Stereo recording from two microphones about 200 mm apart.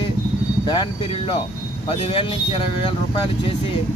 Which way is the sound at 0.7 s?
25° left (ahead or behind).